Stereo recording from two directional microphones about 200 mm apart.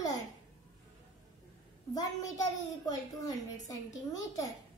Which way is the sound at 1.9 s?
20° left (ahead or behind).